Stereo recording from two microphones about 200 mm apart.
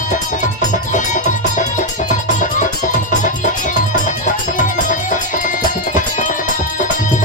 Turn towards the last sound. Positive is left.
turn(degrees=40)  # may be behind; listen again after turning